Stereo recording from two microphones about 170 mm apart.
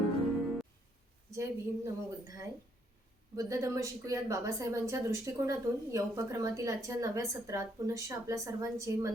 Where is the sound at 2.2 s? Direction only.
20° right (ahead or behind).